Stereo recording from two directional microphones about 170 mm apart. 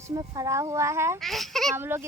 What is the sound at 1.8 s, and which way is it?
Speech, 15° right (ahead or behind).